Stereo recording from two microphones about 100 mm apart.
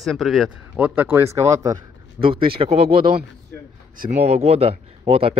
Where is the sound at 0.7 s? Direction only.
15° right (ahead or behind); by 1.8 s 35° right (ahead or behind).